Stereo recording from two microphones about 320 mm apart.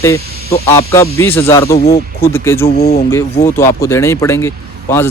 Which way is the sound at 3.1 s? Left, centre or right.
Centre.